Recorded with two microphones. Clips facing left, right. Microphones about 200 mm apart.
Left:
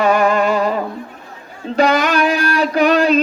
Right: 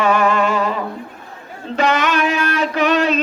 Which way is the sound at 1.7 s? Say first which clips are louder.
Left 3 dB; 35° left (ahead or behind).